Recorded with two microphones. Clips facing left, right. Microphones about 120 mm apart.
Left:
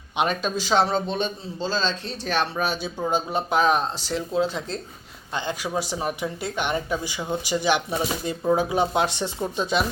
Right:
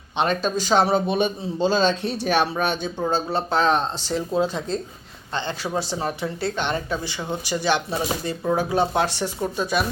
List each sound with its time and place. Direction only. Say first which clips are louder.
0.2 s a man's voice: right 2 dB; 5° left (ahead or behind); by 2.3 s 15° right (ahead or behind)
2.3 s speech: right 2 dB; centre (ahead or behind)
3.1 s speech: even; 15° left (ahead or behind)